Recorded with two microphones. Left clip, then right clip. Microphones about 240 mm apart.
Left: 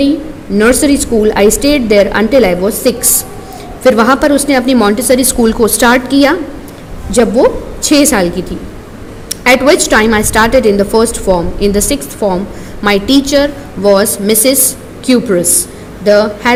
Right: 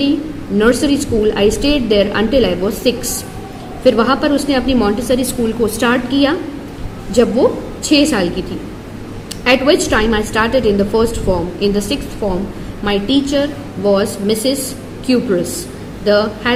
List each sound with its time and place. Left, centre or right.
0.6 s a woman's voice: left